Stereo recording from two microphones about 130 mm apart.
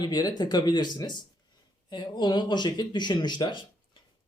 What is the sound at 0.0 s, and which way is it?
Speech, 30° left (ahead or behind).